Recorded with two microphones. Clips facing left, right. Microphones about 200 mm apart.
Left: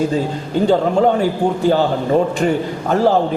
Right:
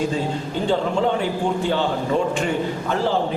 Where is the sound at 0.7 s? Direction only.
40° left (ahead or behind).